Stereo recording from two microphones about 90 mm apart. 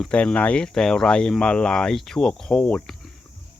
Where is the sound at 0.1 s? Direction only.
15° left (ahead or behind).